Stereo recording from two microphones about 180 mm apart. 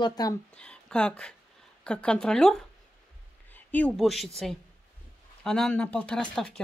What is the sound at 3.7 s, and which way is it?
Speech, 5° left (ahead or behind).